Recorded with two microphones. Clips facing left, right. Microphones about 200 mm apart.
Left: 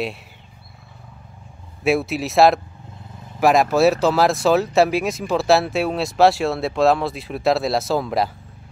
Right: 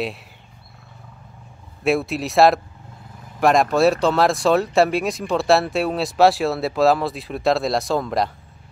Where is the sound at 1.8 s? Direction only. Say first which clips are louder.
Left 1 dB; centre (ahead or behind).